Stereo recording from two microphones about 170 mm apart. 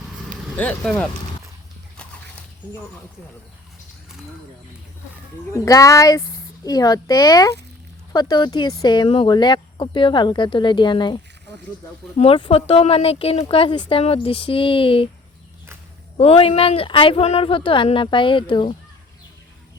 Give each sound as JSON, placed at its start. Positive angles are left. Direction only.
{"t": 0.5, "sound": "speech", "side_deg": 10}
{"t": 5.5, "sound": "speech", "side_deg": 20}
{"t": 16.1, "sound": "speech", "side_deg": 35}